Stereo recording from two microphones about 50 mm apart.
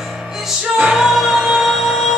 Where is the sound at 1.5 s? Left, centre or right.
Centre.